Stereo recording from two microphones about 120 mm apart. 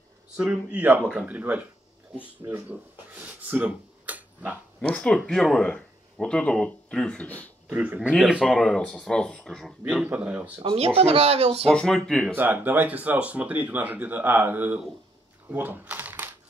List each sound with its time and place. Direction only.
0.4 s speech: 10° right (ahead or behind)
4.7 s speech: 10° left (ahead or behind)
7.6 s speech: 15° right (ahead or behind)
8.2 s speech: centre (ahead or behind)
10.0 s speech: 15° right (ahead or behind)
10.6 s speech: 55° right (ahead or behind)
11.7 s speech: 5° left (ahead or behind)
12.4 s speech: 15° right (ahead or behind)
15.4 s typewriter: 15° right (ahead or behind)